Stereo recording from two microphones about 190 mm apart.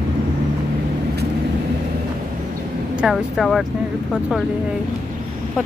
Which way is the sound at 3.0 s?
Centre (ahead or behind).